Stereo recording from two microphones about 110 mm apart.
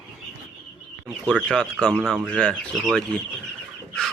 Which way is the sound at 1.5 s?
5° left (ahead or behind).